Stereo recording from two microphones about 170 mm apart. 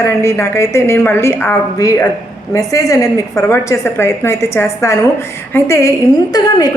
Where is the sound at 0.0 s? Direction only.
15° left (ahead or behind).